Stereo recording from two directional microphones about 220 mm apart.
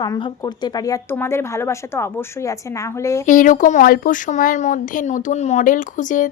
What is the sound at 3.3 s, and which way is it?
Speech, 35° left (ahead or behind).